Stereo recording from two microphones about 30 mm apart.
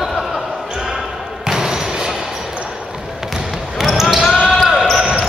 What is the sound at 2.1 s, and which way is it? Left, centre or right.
Basketball bounce, centre.